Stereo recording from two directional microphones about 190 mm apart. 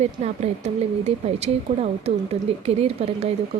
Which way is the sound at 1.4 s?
30° right (ahead or behind).